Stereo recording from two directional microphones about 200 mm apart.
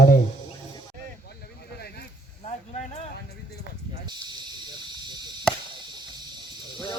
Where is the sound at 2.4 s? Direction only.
35° left (ahead or behind).